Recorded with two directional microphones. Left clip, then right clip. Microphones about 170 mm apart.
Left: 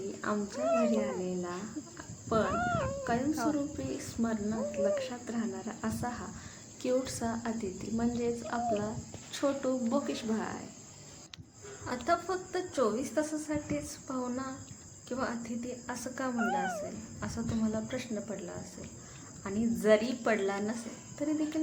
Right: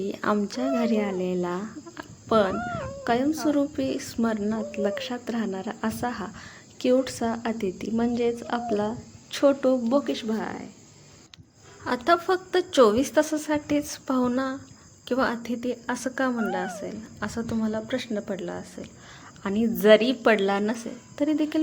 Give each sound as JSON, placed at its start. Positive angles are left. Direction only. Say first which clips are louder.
{"t": 0.2, "sound": "speech", "louder": "right 9 dB", "side_deg": -50}
{"t": 0.7, "sound": "speech", "louder": "right 3 dB", "side_deg": 0}
{"t": 1.2, "sound": "speech", "louder": "right 9 dB", "side_deg": -55}
{"t": 2.0, "sound": "a sound", "louder": "right 9 dB", "side_deg": -50}
{"t": 2.5, "sound": "speech", "louder": "right 1 dB", "side_deg": 0}
{"t": 3.0, "sound": "speech", "louder": "right 7 dB", "side_deg": -50}
{"t": 12.0, "sound": "a woman's voice", "louder": "right 9 dB", "side_deg": -50}